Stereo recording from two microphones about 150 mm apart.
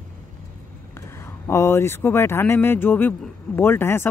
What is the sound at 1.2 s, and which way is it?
Speech, 15° left (ahead or behind).